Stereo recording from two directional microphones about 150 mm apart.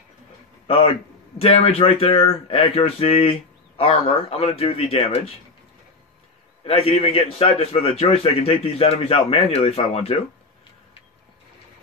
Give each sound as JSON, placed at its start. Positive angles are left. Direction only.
{"t": 0.7, "sound": "a man's voice", "side_deg": 40}
{"t": 6.6, "sound": "speech", "side_deg": 40}